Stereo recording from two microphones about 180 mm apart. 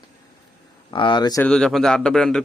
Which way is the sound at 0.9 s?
25° left (ahead or behind).